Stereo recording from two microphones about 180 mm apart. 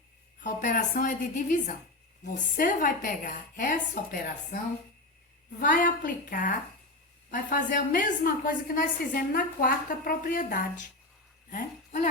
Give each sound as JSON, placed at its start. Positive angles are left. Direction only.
{"t": 0.4, "sound": "a woman's voice", "side_deg": 45}
{"t": 5.5, "sound": "a woman's voice", "side_deg": 50}